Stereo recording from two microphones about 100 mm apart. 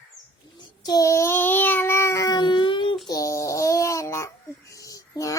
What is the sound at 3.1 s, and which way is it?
Babbling, 35° left (ahead or behind).